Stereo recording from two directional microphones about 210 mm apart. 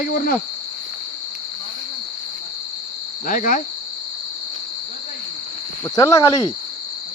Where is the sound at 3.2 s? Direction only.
40° left (ahead or behind).